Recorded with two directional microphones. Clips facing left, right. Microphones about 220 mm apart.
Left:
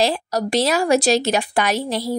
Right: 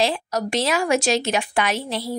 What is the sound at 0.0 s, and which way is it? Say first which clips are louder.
Speech: left 2 dB; 35° left (ahead or behind).